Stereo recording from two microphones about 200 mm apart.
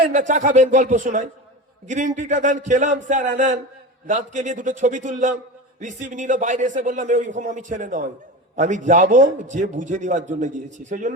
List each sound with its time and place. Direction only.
0.1 s a man's voice: 40° right (ahead or behind)